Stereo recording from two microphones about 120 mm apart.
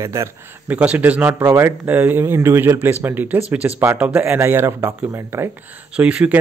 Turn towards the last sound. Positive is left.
turn(degrees=-10)  # may be behind; listen again after turning